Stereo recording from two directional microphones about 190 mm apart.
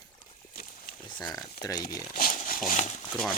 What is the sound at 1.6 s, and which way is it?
Speech, 20° left (ahead or behind).